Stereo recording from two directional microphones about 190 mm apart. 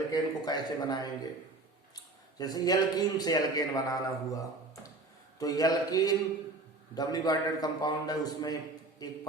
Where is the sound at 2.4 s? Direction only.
20° left (ahead or behind).